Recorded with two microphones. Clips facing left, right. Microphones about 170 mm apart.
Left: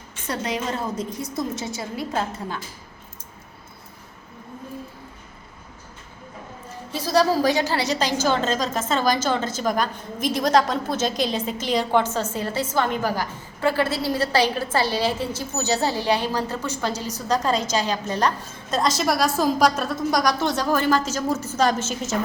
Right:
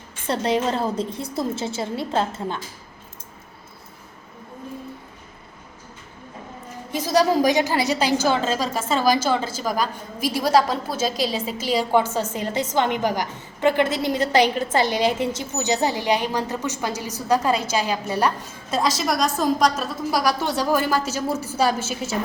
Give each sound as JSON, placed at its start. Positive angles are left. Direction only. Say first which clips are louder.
{"t": 0.3, "sound": "a woman's voice", "louder": "right 5 dB", "side_deg": -30}
{"t": 6.9, "sound": "a woman's voice", "louder": "right 1 dB", "side_deg": -15}